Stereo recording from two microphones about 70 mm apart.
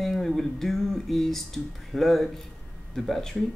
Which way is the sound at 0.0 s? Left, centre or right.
Centre.